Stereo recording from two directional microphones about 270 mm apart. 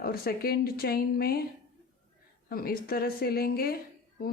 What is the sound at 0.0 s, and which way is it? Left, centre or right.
Speech, left.